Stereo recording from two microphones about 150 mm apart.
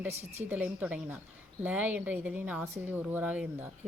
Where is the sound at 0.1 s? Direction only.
45° right (ahead or behind).